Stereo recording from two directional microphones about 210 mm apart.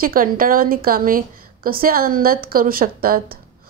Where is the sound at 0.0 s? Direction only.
45° right (ahead or behind).